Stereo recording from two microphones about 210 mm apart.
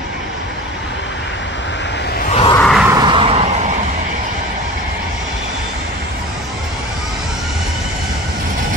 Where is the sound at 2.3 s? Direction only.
25° left (ahead or behind).